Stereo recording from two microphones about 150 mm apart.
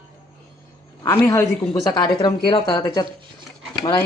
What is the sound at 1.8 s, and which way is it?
Speech, 30° left (ahead or behind).